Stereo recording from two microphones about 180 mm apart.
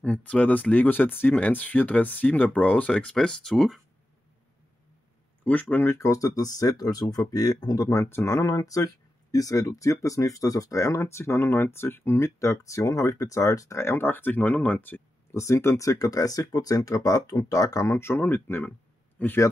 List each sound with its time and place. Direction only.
0.0 s speech: 5° left (ahead or behind)
5.4 s speech: 10° left (ahead or behind)